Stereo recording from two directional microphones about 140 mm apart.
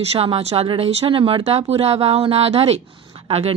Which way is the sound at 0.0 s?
45° right (ahead or behind).